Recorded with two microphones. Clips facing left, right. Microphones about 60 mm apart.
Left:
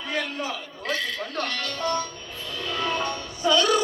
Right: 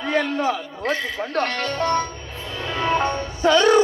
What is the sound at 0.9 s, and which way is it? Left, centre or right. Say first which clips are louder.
Speech: right 4 dB; right.